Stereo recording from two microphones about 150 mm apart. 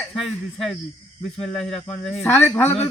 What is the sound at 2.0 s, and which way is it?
Speech, 15° left (ahead or behind).